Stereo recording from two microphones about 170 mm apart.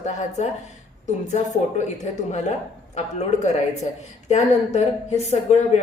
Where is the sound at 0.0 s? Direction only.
45° left (ahead or behind).